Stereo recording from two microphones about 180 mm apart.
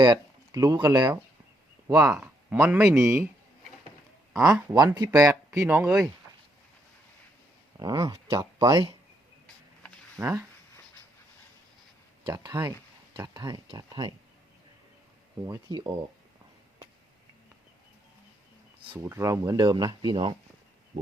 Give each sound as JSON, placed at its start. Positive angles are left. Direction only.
{"t": 0.0, "sound": "speech", "side_deg": -20}
{"t": 4.7, "sound": "speech", "side_deg": -20}
{"t": 7.8, "sound": "speech", "side_deg": -20}
{"t": 10.2, "sound": "speech", "side_deg": -15}
{"t": 12.2, "sound": "speech", "side_deg": -20}
{"t": 15.4, "sound": "speech", "side_deg": -20}
{"t": 18.9, "sound": "speech", "side_deg": -15}